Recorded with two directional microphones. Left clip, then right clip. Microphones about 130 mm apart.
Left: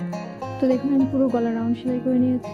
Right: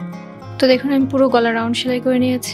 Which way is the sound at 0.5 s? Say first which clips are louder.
Right 7 dB; 10° right (ahead or behind).